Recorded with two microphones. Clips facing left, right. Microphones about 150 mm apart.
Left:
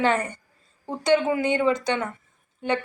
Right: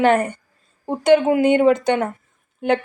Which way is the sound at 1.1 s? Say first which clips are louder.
Right 7 dB; 55° right (ahead or behind).